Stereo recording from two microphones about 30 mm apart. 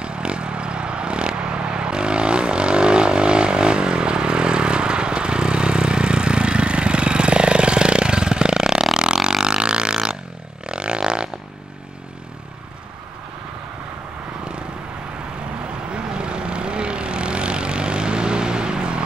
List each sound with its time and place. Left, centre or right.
0.0 s vehicle: right
8.9 s burping: right
9.4 s didgeridoo: right
10.7 s music: right
15.9 s vehicle: right